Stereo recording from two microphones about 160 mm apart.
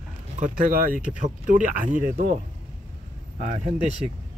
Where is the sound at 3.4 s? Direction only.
50° right (ahead or behind).